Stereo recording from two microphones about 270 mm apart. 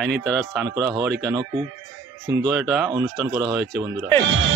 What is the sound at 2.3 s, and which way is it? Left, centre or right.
Speech, centre.